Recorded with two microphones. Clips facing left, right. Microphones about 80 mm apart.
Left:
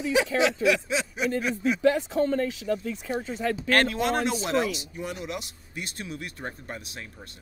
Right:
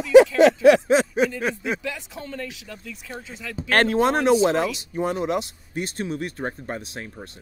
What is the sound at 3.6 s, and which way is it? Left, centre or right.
Speech, right.